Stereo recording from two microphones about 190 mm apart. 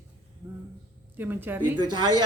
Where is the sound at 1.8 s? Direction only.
25° right (ahead or behind).